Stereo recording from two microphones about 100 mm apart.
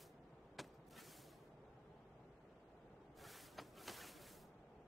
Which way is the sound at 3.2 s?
Centre (ahead or behind).